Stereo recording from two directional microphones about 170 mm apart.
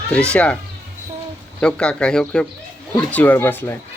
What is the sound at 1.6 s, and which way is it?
Speech, 5° left (ahead or behind).